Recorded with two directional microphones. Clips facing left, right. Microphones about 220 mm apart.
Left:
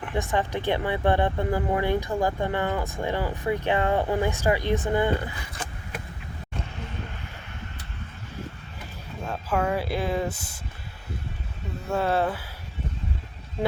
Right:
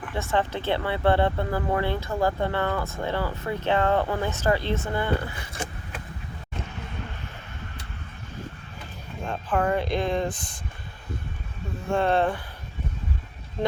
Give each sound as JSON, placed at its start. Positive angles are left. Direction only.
{"t": 0.1, "sound": "speech", "side_deg": 15}
{"t": 9.2, "sound": "speech", "side_deg": 5}
{"t": 11.9, "sound": "speech", "side_deg": 5}
{"t": 13.6, "sound": "speech", "side_deg": 10}